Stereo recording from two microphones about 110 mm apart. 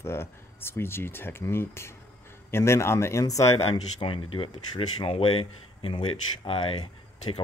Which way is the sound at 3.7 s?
50° left (ahead or behind).